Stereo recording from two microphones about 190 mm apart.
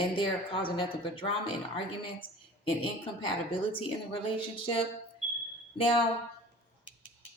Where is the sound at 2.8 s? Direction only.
30° left (ahead or behind).